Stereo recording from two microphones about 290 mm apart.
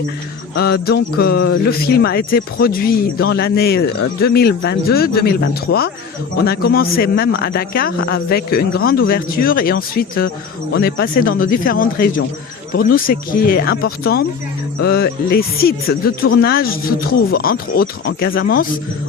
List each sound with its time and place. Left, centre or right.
0.5 s speech: left